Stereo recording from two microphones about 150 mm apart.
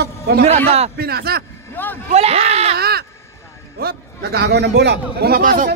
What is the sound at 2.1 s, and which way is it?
Speech, 45° right (ahead or behind).